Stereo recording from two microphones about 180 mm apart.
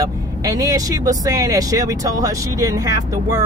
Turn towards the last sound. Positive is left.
turn(degrees=-20)  # may be behind; listen again after turning